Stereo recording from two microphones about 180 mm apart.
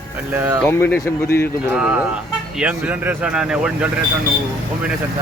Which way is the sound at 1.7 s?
5° right (ahead or behind).